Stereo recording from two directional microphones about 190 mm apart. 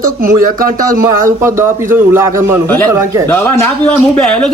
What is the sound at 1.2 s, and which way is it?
Speech, 15° right (ahead or behind).